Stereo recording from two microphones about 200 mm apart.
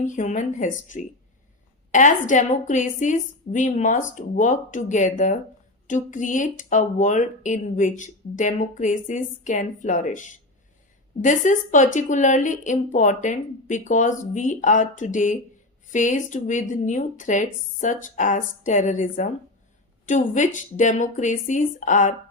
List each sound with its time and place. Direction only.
0.0 s speech: 40° left (ahead or behind)
1.9 s speech: 40° left (ahead or behind)